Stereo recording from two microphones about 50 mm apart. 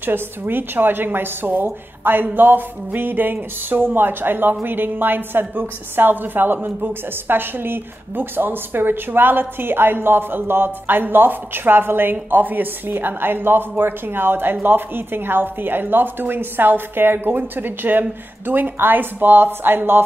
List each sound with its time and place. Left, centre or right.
0.0 s a woman's voice: right